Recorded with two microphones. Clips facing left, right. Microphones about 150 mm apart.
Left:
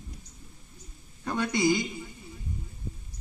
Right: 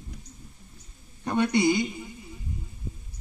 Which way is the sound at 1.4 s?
60° right (ahead or behind).